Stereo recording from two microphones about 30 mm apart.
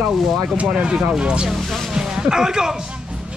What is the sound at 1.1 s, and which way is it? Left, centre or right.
Speech, right.